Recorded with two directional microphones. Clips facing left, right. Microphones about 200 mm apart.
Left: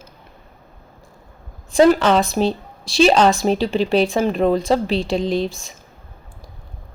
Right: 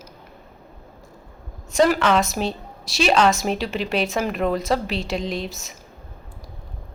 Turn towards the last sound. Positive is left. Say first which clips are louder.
# left 7 dB
turn(degrees=30)  # may be behind; listen again after turning